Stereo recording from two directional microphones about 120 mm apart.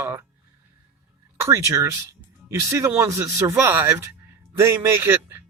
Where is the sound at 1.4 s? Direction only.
25° right (ahead or behind).